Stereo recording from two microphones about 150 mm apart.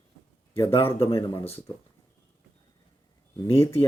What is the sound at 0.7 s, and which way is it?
Speech, 40° left (ahead or behind).